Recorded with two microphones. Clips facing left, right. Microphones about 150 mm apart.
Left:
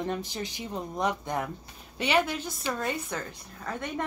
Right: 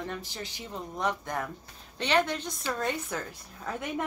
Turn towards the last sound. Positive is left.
turn(degrees=-5)  # may be behind; listen again after turning